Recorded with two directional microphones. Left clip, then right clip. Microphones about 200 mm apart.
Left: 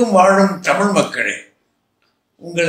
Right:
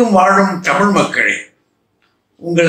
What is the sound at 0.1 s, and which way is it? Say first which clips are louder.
A man's voice: right 1 dB; 40° left (ahead or behind).